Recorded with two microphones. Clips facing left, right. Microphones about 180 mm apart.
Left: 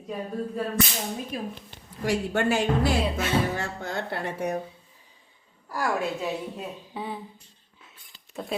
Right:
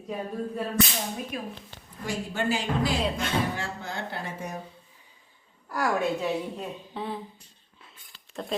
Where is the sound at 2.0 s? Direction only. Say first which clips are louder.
Left 4 dB; 60° left (ahead or behind).